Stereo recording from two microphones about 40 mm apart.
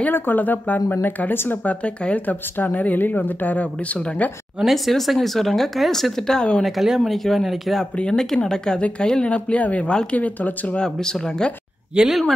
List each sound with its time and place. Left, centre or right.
0.1 s speech: left
1.6 s speech: left
4.6 s speech: centre
6.6 s speech: centre
8.0 s speech: centre
9.3 s speech: left
10.8 s speech: left
11.9 s speech: right